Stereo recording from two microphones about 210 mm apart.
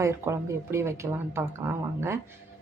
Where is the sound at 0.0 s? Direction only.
15° right (ahead or behind).